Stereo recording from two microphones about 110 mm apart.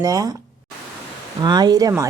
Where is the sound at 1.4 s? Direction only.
40° right (ahead or behind).